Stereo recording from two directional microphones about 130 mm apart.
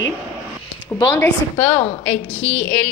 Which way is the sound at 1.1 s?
10° left (ahead or behind).